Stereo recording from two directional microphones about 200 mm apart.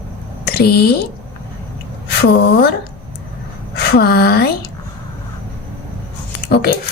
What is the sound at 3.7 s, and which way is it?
Speech, 50° left (ahead or behind).